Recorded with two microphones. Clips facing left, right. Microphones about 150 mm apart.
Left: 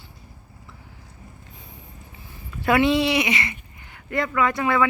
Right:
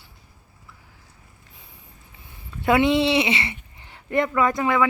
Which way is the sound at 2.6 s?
20° right (ahead or behind).